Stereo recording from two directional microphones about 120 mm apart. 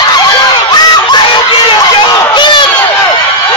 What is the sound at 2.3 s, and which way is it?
Crowd, 40° left (ahead or behind).